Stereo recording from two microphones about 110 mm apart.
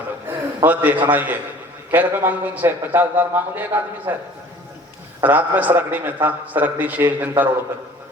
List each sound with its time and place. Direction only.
0.3 s a sound: 15° right (ahead or behind)
1.1 s a man's voice: 15° right (ahead or behind)
5.2 s a man's voice: 15° right (ahead or behind)